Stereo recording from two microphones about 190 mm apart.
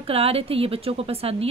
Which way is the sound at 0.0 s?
30° right (ahead or behind).